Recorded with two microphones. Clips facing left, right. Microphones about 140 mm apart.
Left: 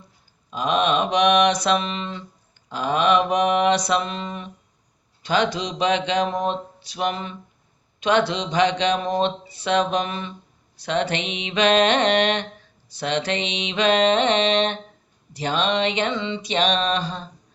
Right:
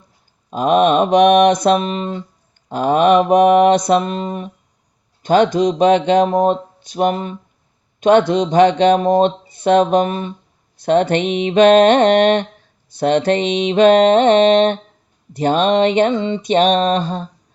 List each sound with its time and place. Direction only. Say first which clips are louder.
0.5 s speech: right 8 dB; 50° right (ahead or behind)